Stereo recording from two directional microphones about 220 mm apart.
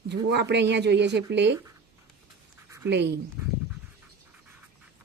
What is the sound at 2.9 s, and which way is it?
Speech, 50° right (ahead or behind).